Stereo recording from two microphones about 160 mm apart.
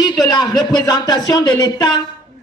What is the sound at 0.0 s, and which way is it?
Speech, 25° left (ahead or behind).